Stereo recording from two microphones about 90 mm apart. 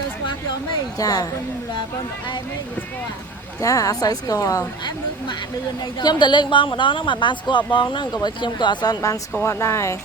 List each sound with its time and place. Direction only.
0.9 s speech: 40° left (ahead or behind)
3.6 s speech: 40° left (ahead or behind)
6.0 s speech: 55° left (ahead or behind)
9.4 s speech: 30° left (ahead or behind)